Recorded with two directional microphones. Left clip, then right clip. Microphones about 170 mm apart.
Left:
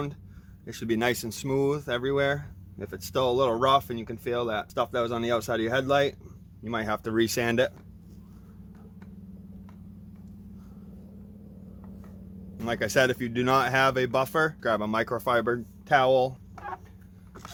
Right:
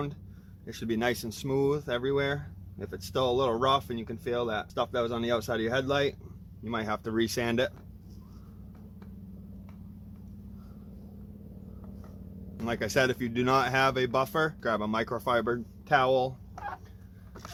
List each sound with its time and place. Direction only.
0.6 s speech: 45° left (ahead or behind)
12.5 s speech: 30° left (ahead or behind)
16.6 s a sound: centre (ahead or behind)